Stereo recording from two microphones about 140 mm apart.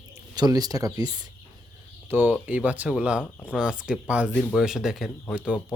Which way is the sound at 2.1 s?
15° right (ahead or behind).